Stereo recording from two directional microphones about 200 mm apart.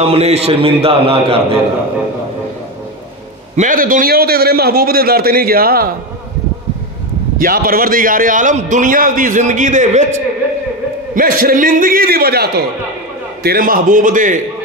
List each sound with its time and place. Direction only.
0.0 s a man's voice: 30° right (ahead or behind)
3.5 s a man's voice: 40° right (ahead or behind)
7.3 s a man's voice: 45° right (ahead or behind)
11.1 s a man's voice: 45° right (ahead or behind)